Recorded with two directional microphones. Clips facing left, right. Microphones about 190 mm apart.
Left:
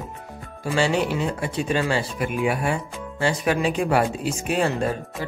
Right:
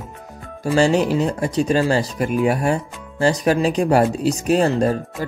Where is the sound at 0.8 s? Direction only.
40° right (ahead or behind).